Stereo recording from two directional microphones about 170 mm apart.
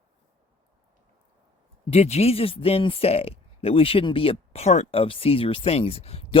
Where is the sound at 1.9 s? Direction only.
40° left (ahead or behind).